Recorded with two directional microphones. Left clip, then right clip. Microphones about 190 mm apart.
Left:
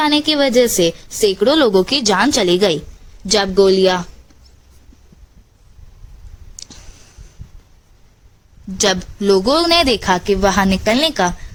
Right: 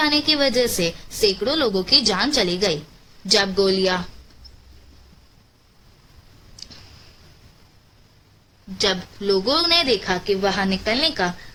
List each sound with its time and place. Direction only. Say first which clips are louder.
0.0 s a woman's voice: left 4 dB; 35° left (ahead or behind)
8.8 s speech: left 5 dB; 45° left (ahead or behind)